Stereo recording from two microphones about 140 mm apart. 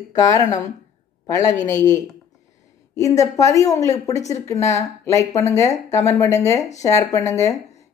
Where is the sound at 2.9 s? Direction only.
25° left (ahead or behind).